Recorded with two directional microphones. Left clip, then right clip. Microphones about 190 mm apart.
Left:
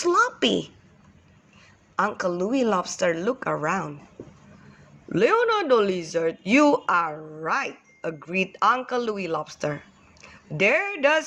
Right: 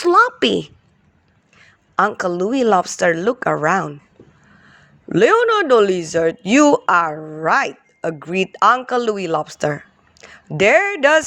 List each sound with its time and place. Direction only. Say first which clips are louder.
0.0 s speech: right 8 dB; 50° right (ahead or behind)
5.0 s speech: right 7 dB; 45° right (ahead or behind)